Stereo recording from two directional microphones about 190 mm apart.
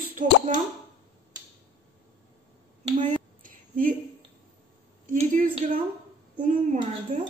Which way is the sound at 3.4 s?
45° right (ahead or behind).